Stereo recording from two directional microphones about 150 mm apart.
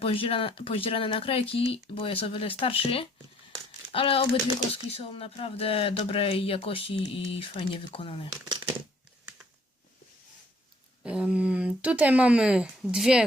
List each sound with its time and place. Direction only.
0.0 s speech: 40° left (ahead or behind)
11.0 s speech: 5° right (ahead or behind)